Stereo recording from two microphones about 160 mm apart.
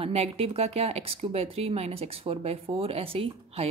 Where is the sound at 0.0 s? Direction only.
40° right (ahead or behind).